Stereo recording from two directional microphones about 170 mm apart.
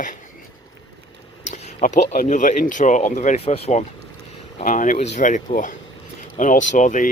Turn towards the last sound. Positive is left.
turn(degrees=50)  # may be behind; listen again after turning